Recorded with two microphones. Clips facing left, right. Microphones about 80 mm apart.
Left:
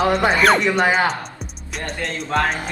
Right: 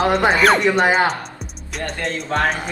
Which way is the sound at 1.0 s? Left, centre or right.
Centre.